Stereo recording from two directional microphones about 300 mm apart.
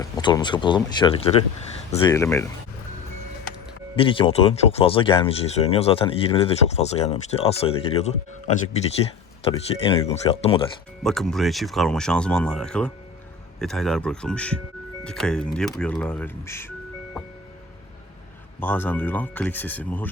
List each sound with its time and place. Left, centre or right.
0.2 s speech: centre
3.9 s speech: centre
11.0 s speech: centre
18.6 s speech: centre